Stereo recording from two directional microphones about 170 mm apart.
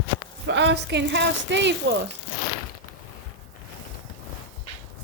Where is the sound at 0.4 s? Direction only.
90° right.